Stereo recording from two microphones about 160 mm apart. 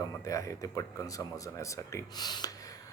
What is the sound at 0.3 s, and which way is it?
Speech, 20° left (ahead or behind).